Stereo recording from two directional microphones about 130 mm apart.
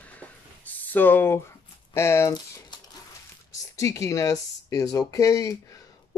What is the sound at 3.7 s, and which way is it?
A child's voice, 25° left (ahead or behind).